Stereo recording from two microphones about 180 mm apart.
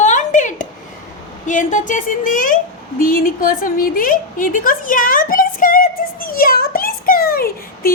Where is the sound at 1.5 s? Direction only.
45° left (ahead or behind).